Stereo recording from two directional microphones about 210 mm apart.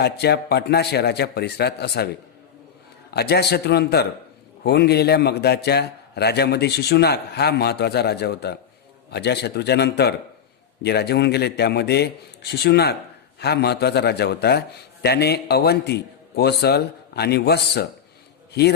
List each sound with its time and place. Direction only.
0.0 s a man's voice: 50° left (ahead or behind)
3.1 s a man's voice: 50° left (ahead or behind)